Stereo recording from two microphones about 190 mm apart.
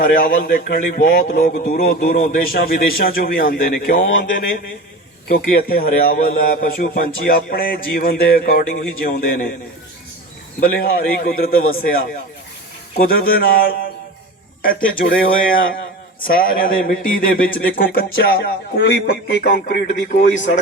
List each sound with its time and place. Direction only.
0.0 s speech: 50° left (ahead or behind)
10.6 s speech: 50° left (ahead or behind)
13.0 s speech: 50° left (ahead or behind)